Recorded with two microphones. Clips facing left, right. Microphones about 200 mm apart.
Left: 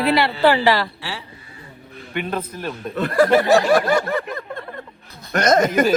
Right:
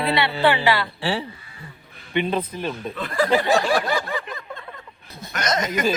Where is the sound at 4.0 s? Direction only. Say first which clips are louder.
Left 6 dB; 55° left (ahead or behind).